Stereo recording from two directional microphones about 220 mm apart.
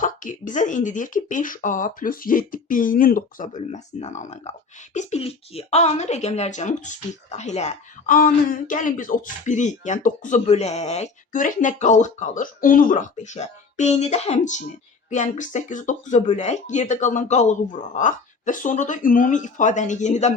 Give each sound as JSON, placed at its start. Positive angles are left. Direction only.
{"t": 0.0, "sound": "speech", "side_deg": 35}